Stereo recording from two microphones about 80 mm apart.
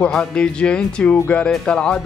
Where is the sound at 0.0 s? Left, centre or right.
Centre.